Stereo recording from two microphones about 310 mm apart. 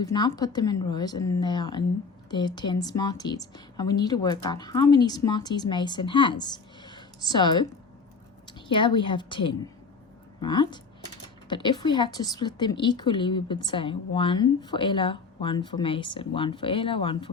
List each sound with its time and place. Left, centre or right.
0.0 s a woman's voice: centre